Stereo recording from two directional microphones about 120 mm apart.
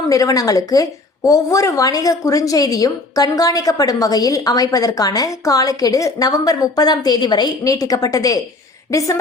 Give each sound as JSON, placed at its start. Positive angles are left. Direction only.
{"t": 0.1, "sound": "a woman's voice", "side_deg": 30}